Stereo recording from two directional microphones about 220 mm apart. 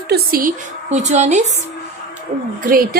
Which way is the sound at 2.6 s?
40° right (ahead or behind).